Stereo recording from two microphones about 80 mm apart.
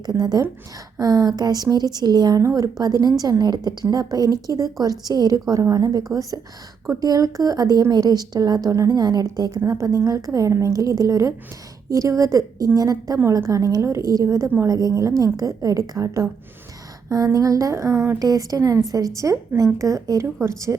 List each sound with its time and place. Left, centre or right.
0.0 s a woman's voice: right